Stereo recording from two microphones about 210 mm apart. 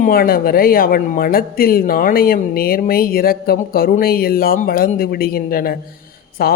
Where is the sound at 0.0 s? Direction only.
45° left (ahead or behind).